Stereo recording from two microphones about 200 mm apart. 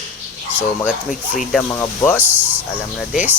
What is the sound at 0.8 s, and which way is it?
Speech, centre (ahead or behind).